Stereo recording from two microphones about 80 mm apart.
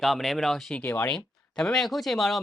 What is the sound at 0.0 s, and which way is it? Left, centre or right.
Speech, centre.